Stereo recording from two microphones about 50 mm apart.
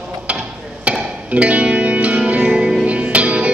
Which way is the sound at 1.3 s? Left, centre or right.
Right.